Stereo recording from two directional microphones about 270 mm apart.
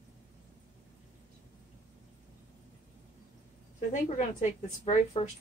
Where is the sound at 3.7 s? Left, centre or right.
Left.